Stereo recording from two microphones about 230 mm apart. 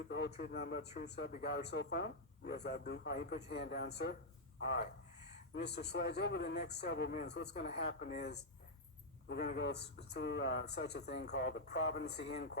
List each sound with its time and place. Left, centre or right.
0.1 s a man's voice: left